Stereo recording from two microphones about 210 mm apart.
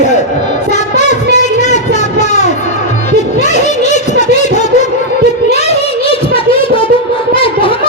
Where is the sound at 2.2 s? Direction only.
35° left (ahead or behind).